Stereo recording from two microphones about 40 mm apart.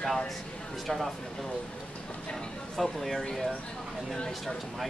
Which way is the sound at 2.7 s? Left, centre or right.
Centre.